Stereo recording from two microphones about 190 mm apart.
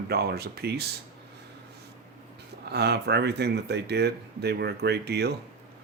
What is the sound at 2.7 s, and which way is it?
Speech, 60° right (ahead or behind).